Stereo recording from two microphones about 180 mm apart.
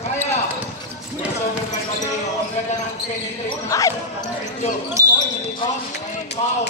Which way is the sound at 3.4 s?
20° left (ahead or behind).